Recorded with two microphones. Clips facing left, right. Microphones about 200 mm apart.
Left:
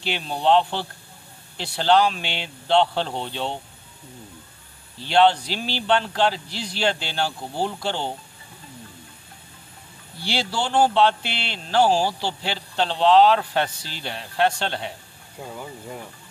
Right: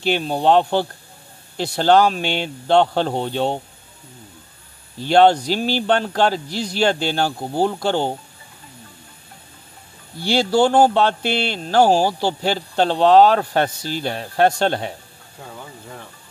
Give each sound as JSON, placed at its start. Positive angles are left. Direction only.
{"t": 0.0, "sound": "speech", "side_deg": -45}
{"t": 5.0, "sound": "speech", "side_deg": -45}
{"t": 10.2, "sound": "speech", "side_deg": -45}